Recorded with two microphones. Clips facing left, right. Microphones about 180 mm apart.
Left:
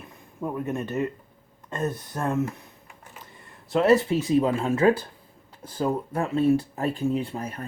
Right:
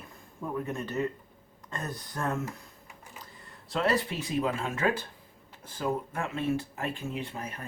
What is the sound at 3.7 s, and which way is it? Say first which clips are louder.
Speech: left 9 dB; 25° left (ahead or behind).